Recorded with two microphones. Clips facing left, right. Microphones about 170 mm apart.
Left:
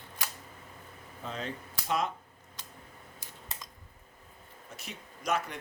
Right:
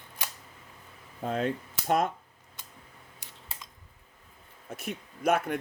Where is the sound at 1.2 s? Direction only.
50° right (ahead or behind).